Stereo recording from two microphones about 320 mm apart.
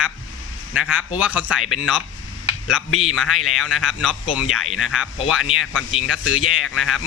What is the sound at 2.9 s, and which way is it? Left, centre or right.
Speech, left.